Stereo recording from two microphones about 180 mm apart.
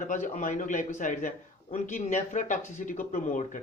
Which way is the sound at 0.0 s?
45° left (ahead or behind).